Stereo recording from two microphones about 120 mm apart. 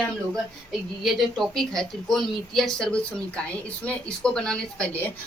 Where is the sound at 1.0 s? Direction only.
Centre (ahead or behind).